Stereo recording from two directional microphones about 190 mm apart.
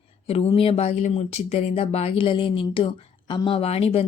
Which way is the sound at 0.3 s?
30° left (ahead or behind).